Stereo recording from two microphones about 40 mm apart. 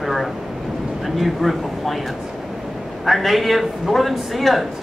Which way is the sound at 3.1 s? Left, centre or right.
Centre.